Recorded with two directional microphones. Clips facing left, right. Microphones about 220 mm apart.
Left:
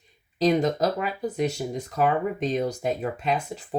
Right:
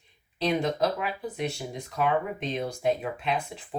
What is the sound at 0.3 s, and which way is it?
Speech, 40° left (ahead or behind).